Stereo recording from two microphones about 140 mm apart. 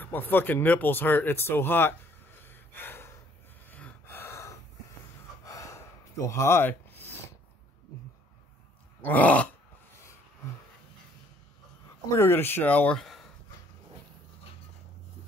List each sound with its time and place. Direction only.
0.0 s speech: 15° left (ahead or behind)
3.7 s gasp: 15° left (ahead or behind)
9.0 s speech: 10° left (ahead or behind)
12.1 s speech: 20° left (ahead or behind); by 13.3 s centre (ahead or behind)